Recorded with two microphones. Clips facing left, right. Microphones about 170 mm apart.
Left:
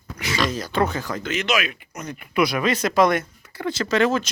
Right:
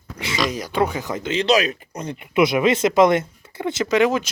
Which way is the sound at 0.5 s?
15° right (ahead or behind).